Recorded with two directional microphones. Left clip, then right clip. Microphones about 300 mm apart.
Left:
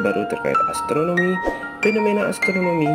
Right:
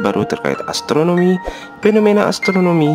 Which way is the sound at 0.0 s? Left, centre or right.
Right.